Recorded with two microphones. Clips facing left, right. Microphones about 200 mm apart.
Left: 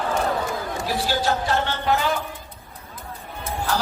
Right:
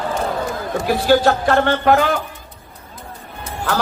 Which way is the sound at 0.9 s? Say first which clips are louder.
Right 9 dB; 55° right (ahead or behind).